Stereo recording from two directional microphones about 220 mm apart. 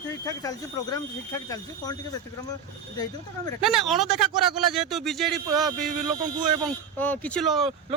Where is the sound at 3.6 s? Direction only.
Centre (ahead or behind).